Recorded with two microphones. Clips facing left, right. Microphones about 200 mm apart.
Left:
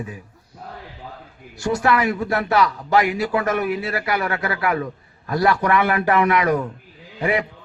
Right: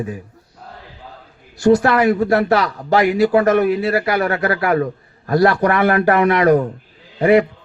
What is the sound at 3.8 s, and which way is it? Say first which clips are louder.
A man's voice: right 6 dB; 40° right (ahead or behind).